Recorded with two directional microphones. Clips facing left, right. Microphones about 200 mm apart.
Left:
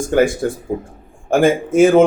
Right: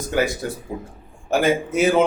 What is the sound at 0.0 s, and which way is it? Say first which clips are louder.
Speech: left 7 dB; 50° left (ahead or behind).